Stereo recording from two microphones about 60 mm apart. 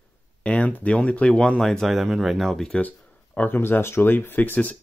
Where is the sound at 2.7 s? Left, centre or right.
Left.